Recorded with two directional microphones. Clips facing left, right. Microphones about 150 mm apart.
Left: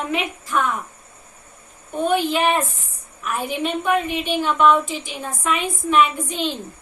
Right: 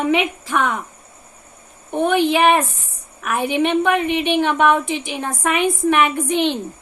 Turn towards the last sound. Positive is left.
turn(degrees=-65)  # may be behind; listen again after turning